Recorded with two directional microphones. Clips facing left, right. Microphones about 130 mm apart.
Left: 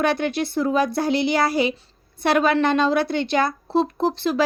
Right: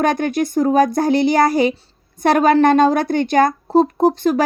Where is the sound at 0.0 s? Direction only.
45° right (ahead or behind).